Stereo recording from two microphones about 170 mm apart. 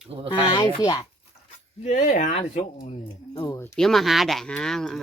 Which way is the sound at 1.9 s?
45° left (ahead or behind).